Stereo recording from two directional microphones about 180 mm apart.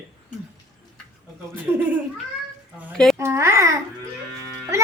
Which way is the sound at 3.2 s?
15° right (ahead or behind).